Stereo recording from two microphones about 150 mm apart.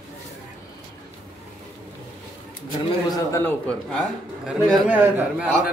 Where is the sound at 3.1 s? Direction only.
20° left (ahead or behind).